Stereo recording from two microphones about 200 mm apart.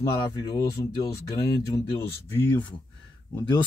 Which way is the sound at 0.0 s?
15° left (ahead or behind).